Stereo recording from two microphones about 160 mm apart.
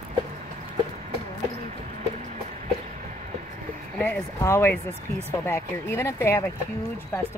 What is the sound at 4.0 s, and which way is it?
Speech, 15° left (ahead or behind).